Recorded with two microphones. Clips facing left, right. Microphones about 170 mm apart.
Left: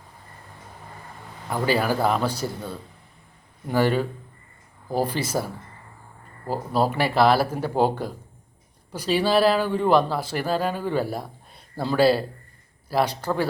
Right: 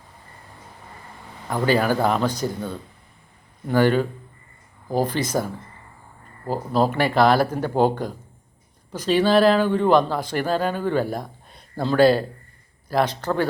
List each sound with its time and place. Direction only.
1.5 s a man's voice: 5° left (ahead or behind)
6.5 s a man's voice: 5° left (ahead or behind)